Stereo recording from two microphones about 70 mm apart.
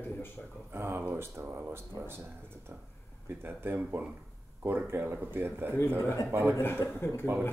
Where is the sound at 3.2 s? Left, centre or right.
Right.